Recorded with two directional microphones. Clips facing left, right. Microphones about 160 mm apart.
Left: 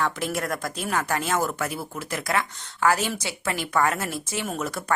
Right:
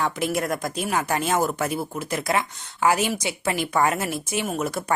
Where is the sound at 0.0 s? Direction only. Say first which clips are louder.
Right 2 dB; 15° right (ahead or behind).